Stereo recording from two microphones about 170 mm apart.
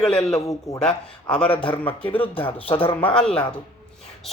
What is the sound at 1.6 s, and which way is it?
Speech, 30° left (ahead or behind).